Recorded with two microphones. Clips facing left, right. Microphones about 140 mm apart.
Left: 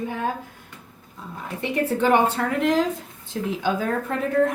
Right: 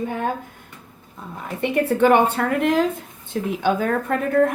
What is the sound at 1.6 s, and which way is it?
Speech, 60° right (ahead or behind).